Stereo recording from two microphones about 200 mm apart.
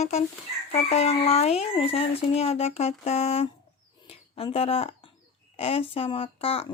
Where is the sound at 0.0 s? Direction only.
30° left (ahead or behind).